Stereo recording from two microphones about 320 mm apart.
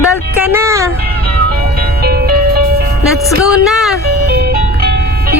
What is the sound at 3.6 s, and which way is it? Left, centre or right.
Speech, centre.